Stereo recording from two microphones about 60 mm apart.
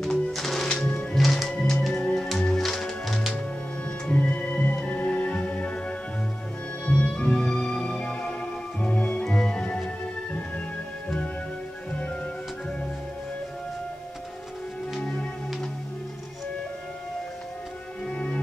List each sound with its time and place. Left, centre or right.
0.0 s music: centre
0.7 s music: centre
4.1 s music: centre
15.0 s music: centre
18.0 s music: centre